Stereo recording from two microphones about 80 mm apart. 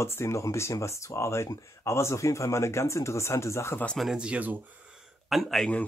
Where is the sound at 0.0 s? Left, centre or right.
Left.